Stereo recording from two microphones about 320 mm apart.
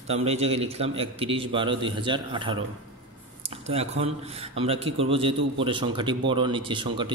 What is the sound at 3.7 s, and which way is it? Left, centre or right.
Speech, centre.